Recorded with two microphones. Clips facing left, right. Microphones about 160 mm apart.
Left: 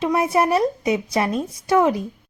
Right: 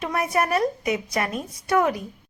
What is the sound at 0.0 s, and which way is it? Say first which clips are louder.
A woman's voice: left 5 dB; 25° left (ahead or behind).